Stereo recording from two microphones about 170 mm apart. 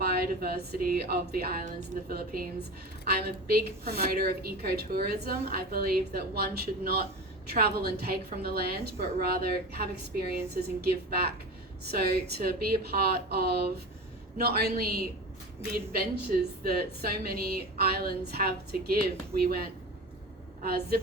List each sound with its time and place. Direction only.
0.0 s a woman's voice: 65° right (ahead or behind)
11.1 s a woman's voice: 65° right (ahead or behind)